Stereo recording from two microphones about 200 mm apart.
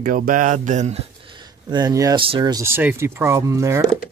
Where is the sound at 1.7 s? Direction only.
20° right (ahead or behind).